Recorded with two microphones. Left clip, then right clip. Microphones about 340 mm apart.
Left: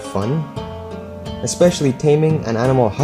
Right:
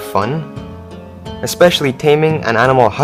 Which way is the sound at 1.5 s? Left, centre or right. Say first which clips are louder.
Right 5 dB; right.